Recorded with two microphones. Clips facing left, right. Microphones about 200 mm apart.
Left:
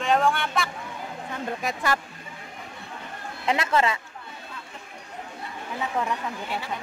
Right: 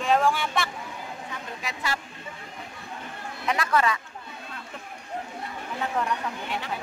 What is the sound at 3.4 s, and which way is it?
Speech, 25° left (ahead or behind).